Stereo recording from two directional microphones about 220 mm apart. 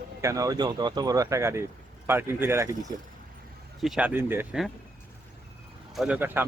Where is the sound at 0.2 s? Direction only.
15° right (ahead or behind).